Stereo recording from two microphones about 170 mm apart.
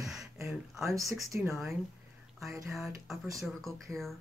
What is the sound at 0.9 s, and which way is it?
Speech, 20° right (ahead or behind).